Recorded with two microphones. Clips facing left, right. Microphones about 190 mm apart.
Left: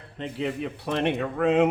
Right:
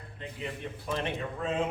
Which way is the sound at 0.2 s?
75° left (ahead or behind).